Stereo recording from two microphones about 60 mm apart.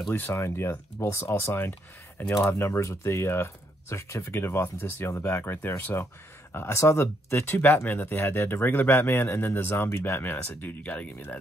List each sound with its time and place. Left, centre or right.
0.1 s speech: left
1.4 s speech: left
2.6 s speech: left
4.3 s speech: left
6.5 s speech: left
7.2 s speech: left
10.8 s speech: left